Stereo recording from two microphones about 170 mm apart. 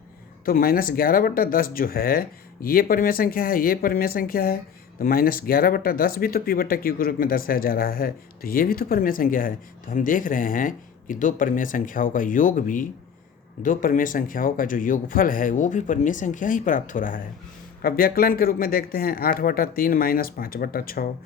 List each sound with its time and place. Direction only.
0.4 s speech: 60° left (ahead or behind)